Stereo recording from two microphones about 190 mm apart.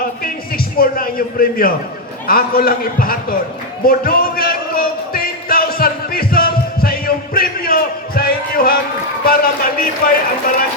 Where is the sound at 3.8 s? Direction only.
50° left (ahead or behind).